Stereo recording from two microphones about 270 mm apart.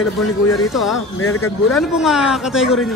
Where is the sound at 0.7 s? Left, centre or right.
Centre.